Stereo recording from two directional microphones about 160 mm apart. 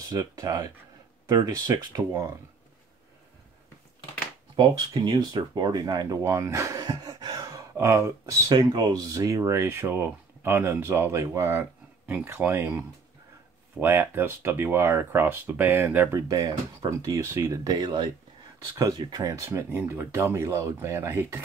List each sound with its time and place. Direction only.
0.1 s speech: 20° right (ahead or behind)
4.6 s speech: 25° right (ahead or behind)